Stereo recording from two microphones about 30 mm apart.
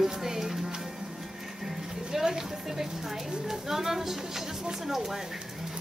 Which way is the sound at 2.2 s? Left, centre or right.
Centre.